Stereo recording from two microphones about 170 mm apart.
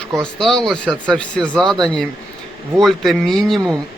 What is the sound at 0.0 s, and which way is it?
Speech, 5° left (ahead or behind).